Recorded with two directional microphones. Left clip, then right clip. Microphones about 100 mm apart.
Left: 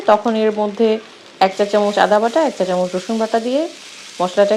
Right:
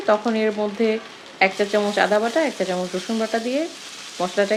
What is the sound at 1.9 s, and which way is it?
Speech, 30° left (ahead or behind).